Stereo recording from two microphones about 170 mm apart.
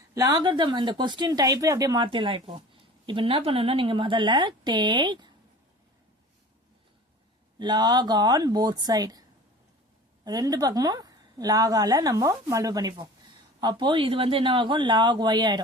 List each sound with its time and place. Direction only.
0.1 s a woman's voice: 20° right (ahead or behind)
7.6 s a woman's voice: 25° right (ahead or behind)
10.2 s a woman's voice: 20° right (ahead or behind)